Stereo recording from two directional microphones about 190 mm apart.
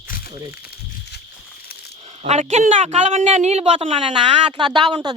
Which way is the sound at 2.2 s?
35° right (ahead or behind).